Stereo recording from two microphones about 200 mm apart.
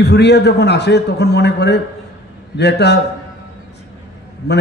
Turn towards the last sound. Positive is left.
turn(degrees=55)  # may be behind; listen again after turning